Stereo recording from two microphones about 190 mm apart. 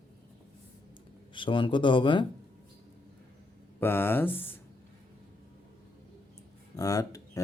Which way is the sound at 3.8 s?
10° left (ahead or behind).